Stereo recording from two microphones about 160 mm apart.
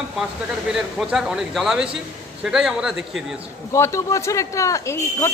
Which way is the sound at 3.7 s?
20° left (ahead or behind).